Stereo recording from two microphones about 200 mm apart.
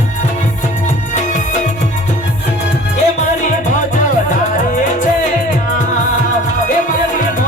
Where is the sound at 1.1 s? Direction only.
35° left (ahead or behind).